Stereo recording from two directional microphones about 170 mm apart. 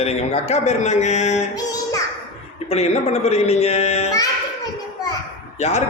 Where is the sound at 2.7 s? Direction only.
40° left (ahead or behind).